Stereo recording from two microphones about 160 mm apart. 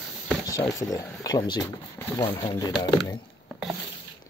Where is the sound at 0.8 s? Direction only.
20° left (ahead or behind).